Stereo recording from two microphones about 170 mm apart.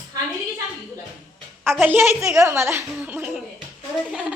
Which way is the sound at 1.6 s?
10° right (ahead or behind).